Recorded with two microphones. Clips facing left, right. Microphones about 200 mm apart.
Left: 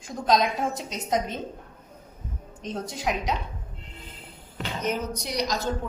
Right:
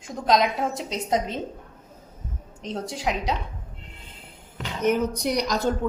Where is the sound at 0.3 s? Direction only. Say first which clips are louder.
Right 1 dB; 25° right (ahead or behind).